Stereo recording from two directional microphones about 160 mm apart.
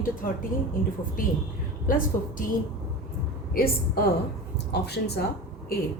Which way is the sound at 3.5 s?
70° left (ahead or behind).